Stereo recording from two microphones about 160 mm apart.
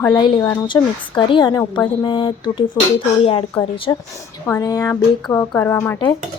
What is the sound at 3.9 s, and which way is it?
A woman's voice, 20° left (ahead or behind).